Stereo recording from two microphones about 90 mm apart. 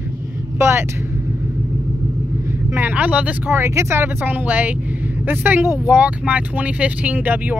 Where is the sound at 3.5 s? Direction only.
30° right (ahead or behind).